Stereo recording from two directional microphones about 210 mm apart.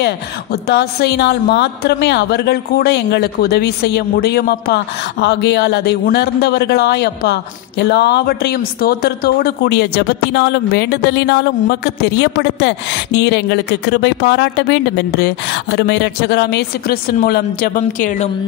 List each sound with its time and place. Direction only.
0.0 s a woman's voice: 50° left (ahead or behind)